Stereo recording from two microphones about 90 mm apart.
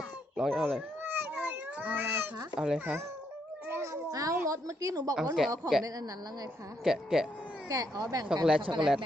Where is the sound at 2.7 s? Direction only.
25° right (ahead or behind).